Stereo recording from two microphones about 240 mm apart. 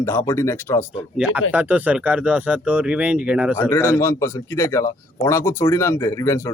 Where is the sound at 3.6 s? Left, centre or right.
Centre.